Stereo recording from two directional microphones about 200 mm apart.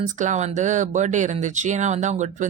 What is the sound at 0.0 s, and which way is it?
Speech, 40° right (ahead or behind).